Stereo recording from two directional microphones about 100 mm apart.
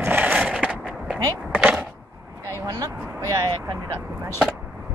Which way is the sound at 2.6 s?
40° right (ahead or behind).